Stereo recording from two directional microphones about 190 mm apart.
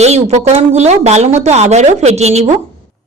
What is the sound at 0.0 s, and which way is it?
A woman's voice, 35° right (ahead or behind).